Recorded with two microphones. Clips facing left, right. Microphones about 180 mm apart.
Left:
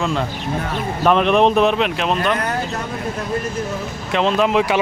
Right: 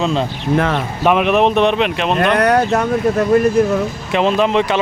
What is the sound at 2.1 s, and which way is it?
Speech, 75° right (ahead or behind).